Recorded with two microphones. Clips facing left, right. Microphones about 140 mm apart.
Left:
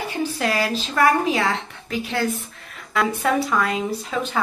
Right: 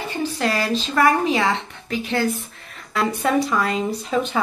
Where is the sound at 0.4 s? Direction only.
5° left (ahead or behind).